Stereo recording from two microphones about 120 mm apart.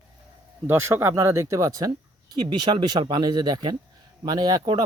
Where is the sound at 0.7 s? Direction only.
20° right (ahead or behind).